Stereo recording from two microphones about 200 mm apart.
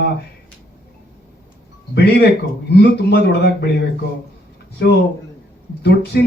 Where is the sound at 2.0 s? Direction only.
55° left (ahead or behind).